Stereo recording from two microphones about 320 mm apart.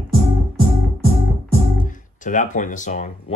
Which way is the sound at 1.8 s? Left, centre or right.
Left.